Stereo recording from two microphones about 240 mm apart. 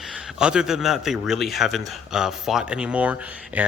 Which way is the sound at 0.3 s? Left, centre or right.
Centre.